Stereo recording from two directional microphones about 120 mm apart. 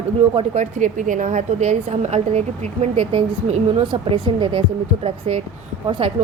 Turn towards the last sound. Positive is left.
turn(degrees=-50)  # may be behind; listen again after turning